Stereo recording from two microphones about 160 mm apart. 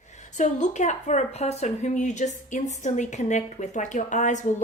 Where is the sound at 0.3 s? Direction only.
50° left (ahead or behind).